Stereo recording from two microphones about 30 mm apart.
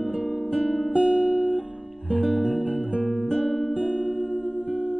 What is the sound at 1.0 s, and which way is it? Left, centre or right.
Guitar, centre.